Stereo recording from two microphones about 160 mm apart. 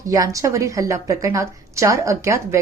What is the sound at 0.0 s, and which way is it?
A woman's voice, 20° right (ahead or behind).